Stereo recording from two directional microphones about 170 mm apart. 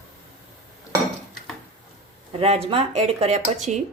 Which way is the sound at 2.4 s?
35° right (ahead or behind).